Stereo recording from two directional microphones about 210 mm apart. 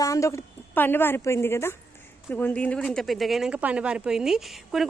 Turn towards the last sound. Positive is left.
turn(degrees=0)  # may be behind; listen again after turning